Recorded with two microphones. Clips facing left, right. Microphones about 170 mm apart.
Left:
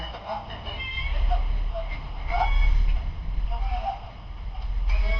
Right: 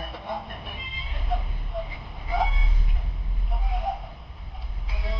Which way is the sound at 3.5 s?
Centre (ahead or behind).